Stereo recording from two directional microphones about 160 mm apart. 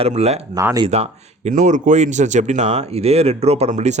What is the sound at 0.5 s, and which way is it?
Speech, 20° right (ahead or behind).